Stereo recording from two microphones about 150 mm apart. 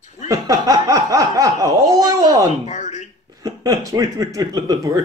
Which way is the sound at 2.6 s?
50° left (ahead or behind).